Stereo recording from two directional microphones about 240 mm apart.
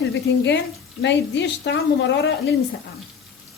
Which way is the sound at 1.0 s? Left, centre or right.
Left.